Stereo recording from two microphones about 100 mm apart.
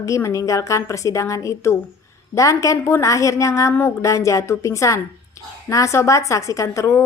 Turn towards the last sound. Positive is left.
turn(degrees=30)  # may be behind; listen again after turning